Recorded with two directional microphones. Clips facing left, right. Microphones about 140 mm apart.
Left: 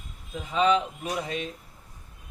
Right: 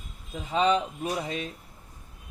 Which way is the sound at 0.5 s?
35° right (ahead or behind).